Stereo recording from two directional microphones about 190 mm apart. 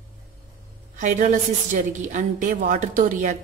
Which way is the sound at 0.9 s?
40° right (ahead or behind).